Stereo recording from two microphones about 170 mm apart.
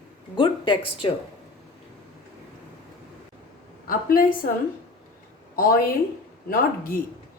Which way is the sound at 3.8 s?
60° left (ahead or behind).